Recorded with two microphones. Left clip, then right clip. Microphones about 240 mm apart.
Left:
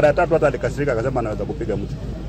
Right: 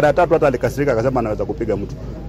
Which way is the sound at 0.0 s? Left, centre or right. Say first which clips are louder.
Right 2 dB; right.